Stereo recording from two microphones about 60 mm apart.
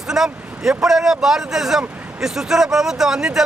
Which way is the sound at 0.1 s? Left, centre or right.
Centre.